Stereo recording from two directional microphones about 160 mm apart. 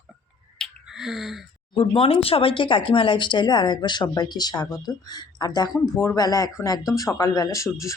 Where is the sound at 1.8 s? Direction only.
35° left (ahead or behind).